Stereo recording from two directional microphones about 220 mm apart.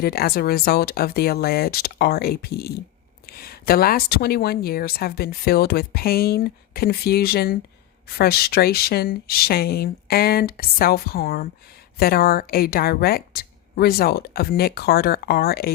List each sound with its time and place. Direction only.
0.0 s speech: 45° left (ahead or behind)